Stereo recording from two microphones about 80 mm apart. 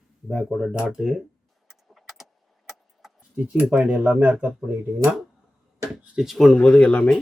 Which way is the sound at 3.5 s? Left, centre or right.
Centre.